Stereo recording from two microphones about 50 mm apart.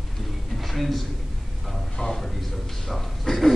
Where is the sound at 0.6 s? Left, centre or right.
Centre.